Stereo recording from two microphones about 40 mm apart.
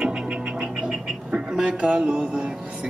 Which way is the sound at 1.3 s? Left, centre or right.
Right.